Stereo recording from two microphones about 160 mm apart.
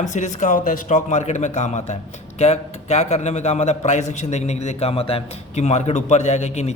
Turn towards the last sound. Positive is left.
turn(degrees=45)  # may be behind; listen again after turning